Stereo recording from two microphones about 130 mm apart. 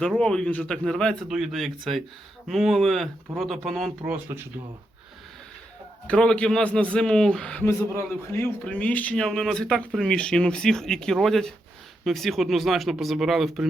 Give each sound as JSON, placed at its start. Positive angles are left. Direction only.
{"t": 0.2, "sound": "speech", "side_deg": 5}
{"t": 4.0, "sound": "speech", "side_deg": -15}
{"t": 6.1, "sound": "speech", "side_deg": 10}
{"t": 7.6, "sound": "a man's voice", "side_deg": 20}
{"t": 8.6, "sound": "speech", "side_deg": 10}